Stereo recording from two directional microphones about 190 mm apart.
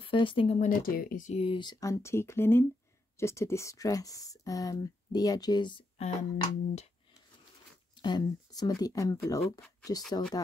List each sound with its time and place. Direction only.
0.0 s speech: 25° left (ahead or behind)
0.7 s speech: 50° left (ahead or behind)
8.0 s speech: 20° left (ahead or behind)